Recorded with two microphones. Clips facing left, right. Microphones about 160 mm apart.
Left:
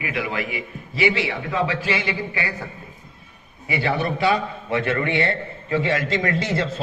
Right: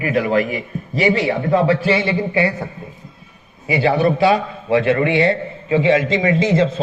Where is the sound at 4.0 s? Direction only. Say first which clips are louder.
Right 6 dB; 25° right (ahead or behind).